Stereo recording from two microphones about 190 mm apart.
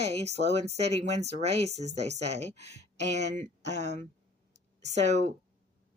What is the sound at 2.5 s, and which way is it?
Speech, 60° left (ahead or behind).